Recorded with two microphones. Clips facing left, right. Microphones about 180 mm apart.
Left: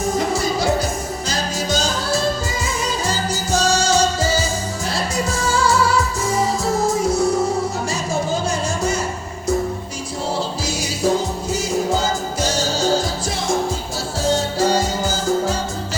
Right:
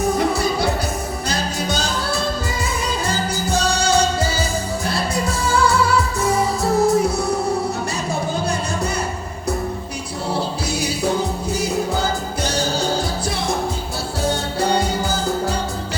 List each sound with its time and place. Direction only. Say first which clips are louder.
0.0 s music: right 1 dB; 60° right (ahead or behind)
12.4 s music: even; 60° right (ahead or behind)
14.3 s music: left 3 dB; 60° right (ahead or behind)